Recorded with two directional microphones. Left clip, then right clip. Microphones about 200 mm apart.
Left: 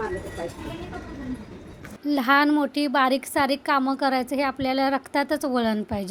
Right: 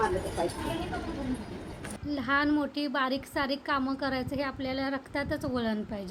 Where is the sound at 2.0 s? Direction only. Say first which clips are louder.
Left 8 dB; 40° left (ahead or behind).